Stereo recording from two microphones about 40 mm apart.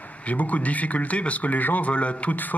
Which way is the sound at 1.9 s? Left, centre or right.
Left.